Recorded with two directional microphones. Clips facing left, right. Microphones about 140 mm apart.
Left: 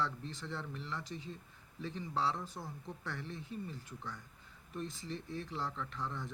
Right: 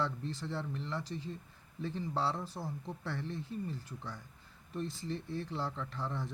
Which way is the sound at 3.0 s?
30° right (ahead or behind).